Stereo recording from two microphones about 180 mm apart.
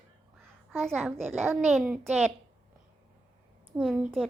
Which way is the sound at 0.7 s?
Centre (ahead or behind).